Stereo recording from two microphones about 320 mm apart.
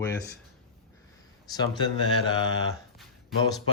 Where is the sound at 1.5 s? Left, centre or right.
Centre.